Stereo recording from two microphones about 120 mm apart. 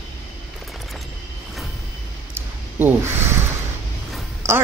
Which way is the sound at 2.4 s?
15° right (ahead or behind).